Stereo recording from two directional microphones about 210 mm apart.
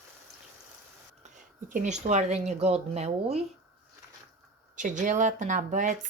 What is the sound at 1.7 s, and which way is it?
A woman's voice, 35° right (ahead or behind).